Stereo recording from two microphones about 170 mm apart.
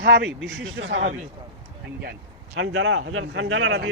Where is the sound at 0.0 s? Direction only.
85° right.